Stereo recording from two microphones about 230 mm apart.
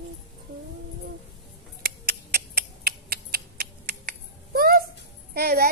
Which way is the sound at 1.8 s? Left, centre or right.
Right.